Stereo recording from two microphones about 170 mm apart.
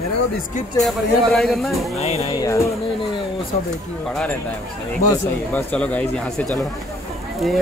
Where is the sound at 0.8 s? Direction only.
Centre (ahead or behind).